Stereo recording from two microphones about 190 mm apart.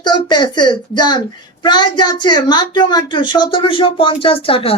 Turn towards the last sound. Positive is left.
turn(degrees=30)  # may be behind; listen again after turning